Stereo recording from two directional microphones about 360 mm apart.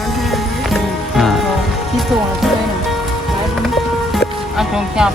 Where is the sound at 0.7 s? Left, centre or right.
Centre.